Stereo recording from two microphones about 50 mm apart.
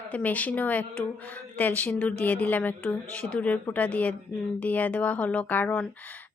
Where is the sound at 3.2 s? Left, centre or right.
Left.